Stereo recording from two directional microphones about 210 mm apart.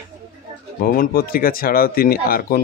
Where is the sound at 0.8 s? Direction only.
45° left (ahead or behind).